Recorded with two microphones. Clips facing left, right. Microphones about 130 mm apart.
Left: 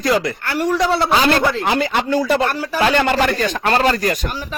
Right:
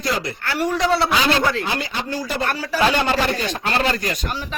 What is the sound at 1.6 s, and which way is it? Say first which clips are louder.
A man's voice: left 7 dB; 65° left (ahead or behind).